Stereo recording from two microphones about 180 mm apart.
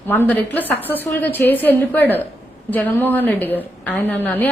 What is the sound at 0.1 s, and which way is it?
A woman's voice, 10° left (ahead or behind).